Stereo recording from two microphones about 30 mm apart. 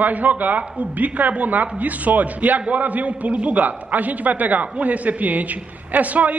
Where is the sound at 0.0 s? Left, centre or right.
Right.